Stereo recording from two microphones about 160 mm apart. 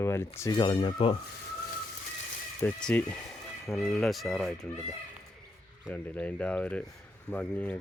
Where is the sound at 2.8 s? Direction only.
5° left (ahead or behind).